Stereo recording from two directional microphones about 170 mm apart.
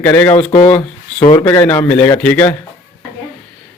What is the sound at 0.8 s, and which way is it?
Speech, 30° left (ahead or behind).